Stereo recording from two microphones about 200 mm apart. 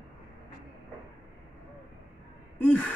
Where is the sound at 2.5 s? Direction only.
10° left (ahead or behind).